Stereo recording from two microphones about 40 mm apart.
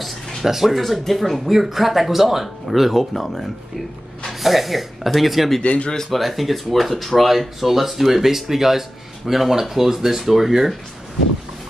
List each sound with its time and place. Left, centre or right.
0.5 s speech: centre
5.6 s speech: left
6.1 s speech: centre